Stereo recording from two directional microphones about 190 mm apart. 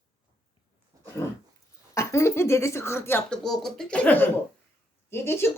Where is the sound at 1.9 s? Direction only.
15° left (ahead or behind).